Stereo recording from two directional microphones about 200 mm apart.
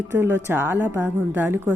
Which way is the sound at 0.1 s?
10° right (ahead or behind).